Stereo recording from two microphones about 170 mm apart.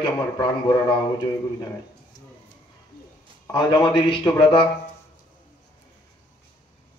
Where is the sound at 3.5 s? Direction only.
25° left (ahead or behind).